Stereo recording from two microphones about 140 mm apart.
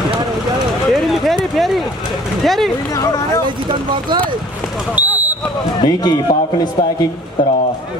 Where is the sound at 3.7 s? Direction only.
35° right (ahead or behind).